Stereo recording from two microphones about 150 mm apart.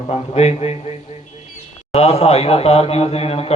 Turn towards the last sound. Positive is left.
turn(degrees=40)  # may be behind; listen again after turning